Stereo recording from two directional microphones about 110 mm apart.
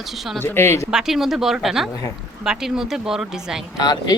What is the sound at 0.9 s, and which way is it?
Speech, 5° right (ahead or behind).